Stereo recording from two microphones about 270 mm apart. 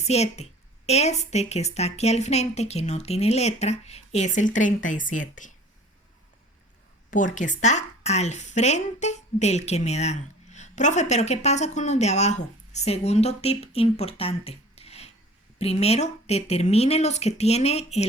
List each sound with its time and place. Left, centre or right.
0.0 s speech: left
7.1 s speech: left